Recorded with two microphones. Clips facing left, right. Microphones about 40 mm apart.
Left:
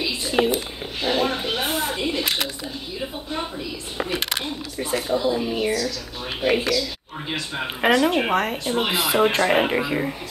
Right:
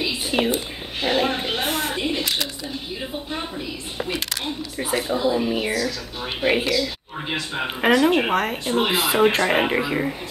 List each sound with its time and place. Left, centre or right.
0.3 s speech: right
1.0 s a sound: right
1.6 s a sound: right
4.7 s speech: centre
5.7 s speech: right
7.8 s speech: centre